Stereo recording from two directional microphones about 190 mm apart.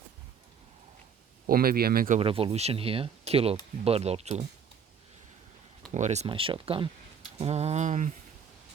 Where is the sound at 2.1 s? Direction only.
30° right (ahead or behind).